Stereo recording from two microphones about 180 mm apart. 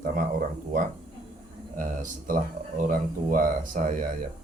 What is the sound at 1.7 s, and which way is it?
Speech, 45° right (ahead or behind).